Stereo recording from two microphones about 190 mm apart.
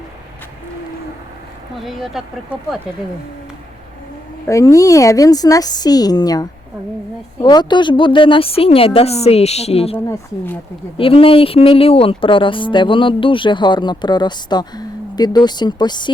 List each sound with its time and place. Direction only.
1.8 s speech: centre (ahead or behind)
4.4 s speech: 15° left (ahead or behind); by 10.0 s 30° left (ahead or behind)
10.1 s speech: 10° left (ahead or behind)
10.9 s speech: 30° left (ahead or behind)